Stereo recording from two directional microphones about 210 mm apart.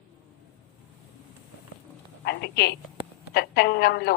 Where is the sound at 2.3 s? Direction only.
50° left (ahead or behind).